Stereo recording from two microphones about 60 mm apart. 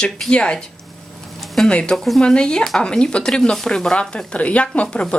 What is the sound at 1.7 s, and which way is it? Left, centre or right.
Speech, centre.